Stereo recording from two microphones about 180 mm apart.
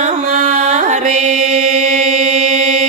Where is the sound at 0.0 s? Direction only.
45° right (ahead or behind).